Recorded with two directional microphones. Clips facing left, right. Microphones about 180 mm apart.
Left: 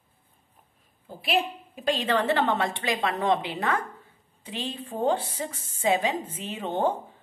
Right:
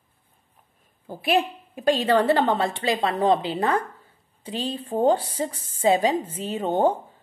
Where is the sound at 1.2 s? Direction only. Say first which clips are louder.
Right 4 dB; 50° right (ahead or behind).